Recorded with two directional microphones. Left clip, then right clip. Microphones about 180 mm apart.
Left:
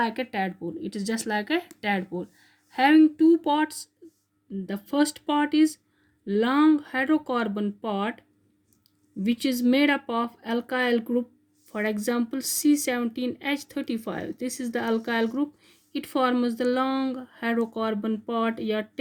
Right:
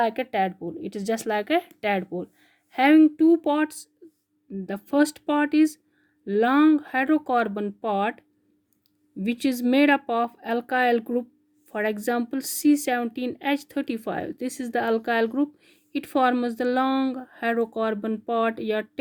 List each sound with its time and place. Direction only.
0.0 s a woman's voice: 55° right (ahead or behind)
9.2 s a woman's voice: 50° right (ahead or behind)